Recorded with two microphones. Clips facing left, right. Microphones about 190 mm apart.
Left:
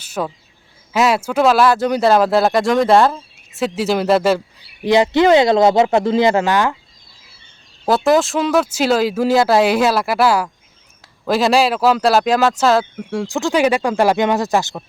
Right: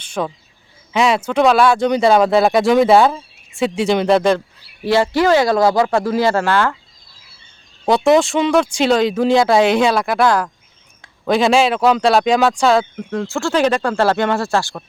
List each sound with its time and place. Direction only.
0.0 s a sound: 5° left (ahead or behind)
0.9 s speech: 5° left (ahead or behind)
4.8 s speech: 15° left (ahead or behind)
7.9 s speech: centre (ahead or behind); by 14.8 s 15° left (ahead or behind)